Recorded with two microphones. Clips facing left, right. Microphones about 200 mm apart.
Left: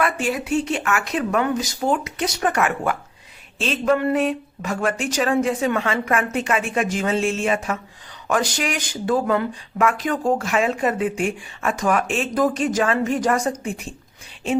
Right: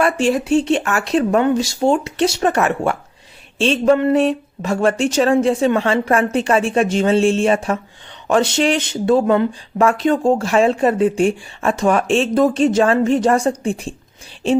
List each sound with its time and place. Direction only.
0.0 s speech: 30° right (ahead or behind)